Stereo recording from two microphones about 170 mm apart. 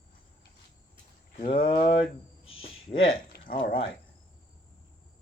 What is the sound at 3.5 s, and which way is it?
Speech, 30° left (ahead or behind).